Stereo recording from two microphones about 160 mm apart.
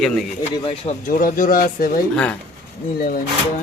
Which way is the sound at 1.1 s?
60° left (ahead or behind).